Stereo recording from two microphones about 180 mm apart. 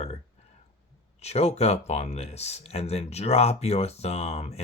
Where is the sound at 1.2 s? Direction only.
35° left (ahead or behind).